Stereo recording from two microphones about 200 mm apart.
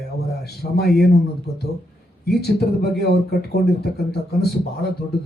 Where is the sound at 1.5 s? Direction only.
50° left (ahead or behind).